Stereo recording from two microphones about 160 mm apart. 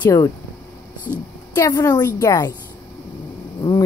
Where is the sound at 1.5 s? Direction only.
20° left (ahead or behind).